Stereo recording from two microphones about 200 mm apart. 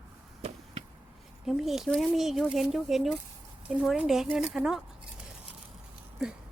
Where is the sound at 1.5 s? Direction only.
Centre (ahead or behind).